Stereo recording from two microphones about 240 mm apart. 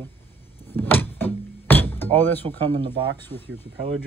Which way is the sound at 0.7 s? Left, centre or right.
Centre.